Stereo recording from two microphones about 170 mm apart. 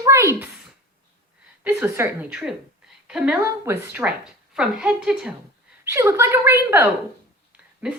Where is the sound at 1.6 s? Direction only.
5° right (ahead or behind).